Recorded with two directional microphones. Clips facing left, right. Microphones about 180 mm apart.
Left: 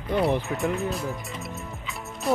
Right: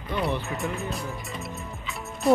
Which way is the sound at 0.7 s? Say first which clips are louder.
Left 4 dB; centre (ahead or behind).